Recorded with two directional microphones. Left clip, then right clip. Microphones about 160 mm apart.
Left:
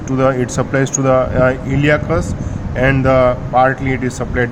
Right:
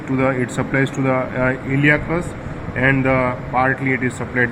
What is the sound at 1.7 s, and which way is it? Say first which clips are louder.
Speech: left 2 dB; 55° left (ahead or behind).